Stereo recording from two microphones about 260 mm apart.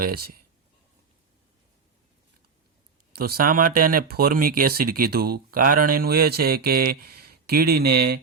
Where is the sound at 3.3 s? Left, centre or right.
Right.